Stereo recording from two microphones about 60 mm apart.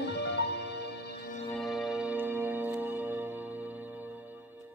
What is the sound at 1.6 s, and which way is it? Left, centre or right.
Music, centre.